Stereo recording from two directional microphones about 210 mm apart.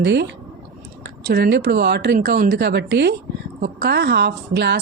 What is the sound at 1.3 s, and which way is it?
A woman's voice, 55° right (ahead or behind).